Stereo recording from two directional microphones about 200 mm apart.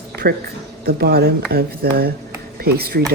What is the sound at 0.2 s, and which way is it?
Speech, 50° right (ahead or behind).